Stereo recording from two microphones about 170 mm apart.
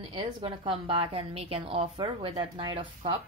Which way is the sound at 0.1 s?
30° right (ahead or behind).